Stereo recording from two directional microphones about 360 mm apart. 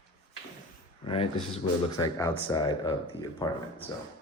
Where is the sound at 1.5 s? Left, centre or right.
Centre.